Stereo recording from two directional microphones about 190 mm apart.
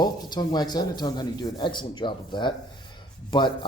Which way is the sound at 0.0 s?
20° left (ahead or behind).